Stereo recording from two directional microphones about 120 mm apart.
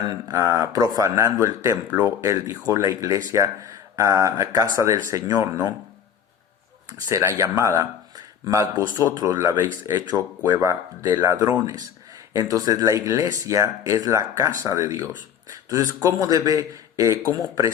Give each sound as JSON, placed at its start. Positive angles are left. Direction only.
{"t": 0.3, "sound": "speech", "side_deg": -25}
{"t": 6.9, "sound": "speech", "side_deg": -25}